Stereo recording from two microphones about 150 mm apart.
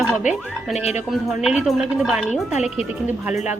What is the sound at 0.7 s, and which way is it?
Speech, 45° left (ahead or behind).